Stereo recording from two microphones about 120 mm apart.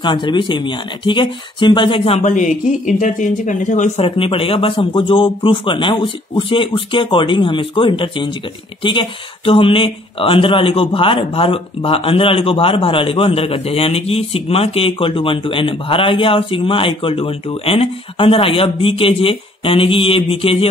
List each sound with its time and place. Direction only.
0.0 s speech: 40° left (ahead or behind)
2.1 s speech: 90° left
4.0 s speech: 50° left (ahead or behind)